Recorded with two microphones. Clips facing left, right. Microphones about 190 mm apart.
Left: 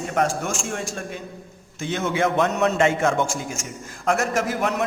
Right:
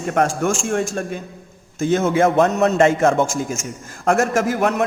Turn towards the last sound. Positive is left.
turn(degrees=-50)  # may be behind; listen again after turning